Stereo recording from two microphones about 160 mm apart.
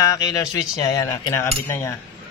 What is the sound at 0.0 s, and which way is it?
A man's voice, 20° left (ahead or behind).